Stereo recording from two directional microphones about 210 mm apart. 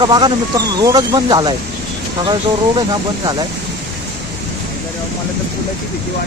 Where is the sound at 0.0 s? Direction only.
20° right (ahead or behind).